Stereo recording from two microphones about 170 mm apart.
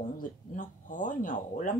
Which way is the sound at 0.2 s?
50° left (ahead or behind).